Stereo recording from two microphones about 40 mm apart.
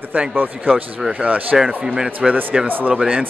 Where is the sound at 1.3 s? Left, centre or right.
Right.